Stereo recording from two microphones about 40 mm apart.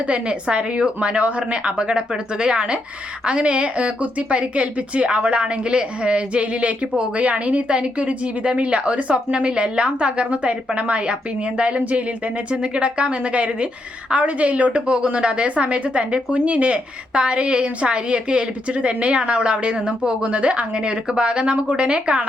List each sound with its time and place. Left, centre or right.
0.1 s a woman's voice: right